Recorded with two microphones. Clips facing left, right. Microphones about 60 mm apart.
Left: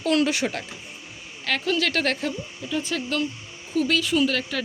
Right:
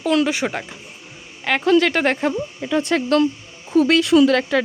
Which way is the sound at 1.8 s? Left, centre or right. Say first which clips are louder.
Right 6 dB; right.